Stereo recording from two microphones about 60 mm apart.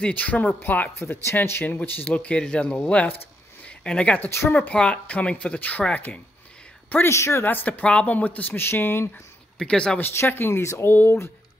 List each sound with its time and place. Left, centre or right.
0.0 s speech: left
0.9 s speech: left
2.0 s speech: left
4.3 s speech: left
4.6 s speech: centre
7.1 s speech: left
7.4 s speech: left
9.6 s speech: centre
10.1 s speech: left